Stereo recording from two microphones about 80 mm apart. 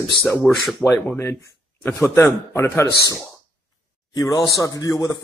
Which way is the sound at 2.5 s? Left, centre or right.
Left.